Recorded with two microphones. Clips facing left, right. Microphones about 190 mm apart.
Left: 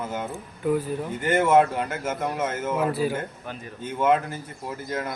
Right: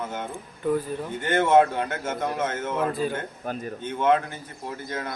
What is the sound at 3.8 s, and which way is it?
Speech, 5° left (ahead or behind).